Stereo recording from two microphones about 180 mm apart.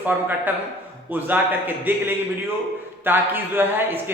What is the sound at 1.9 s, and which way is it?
Speech, 10° right (ahead or behind).